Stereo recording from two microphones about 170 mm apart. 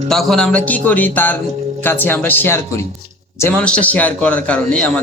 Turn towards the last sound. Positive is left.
turn(degrees=5)  # may be behind; listen again after turning